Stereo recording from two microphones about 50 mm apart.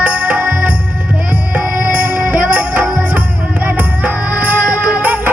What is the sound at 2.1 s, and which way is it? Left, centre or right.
Music, right.